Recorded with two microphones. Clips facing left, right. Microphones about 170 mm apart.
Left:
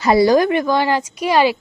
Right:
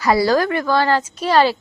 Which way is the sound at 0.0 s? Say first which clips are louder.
Left 3 dB; 20° left (ahead or behind).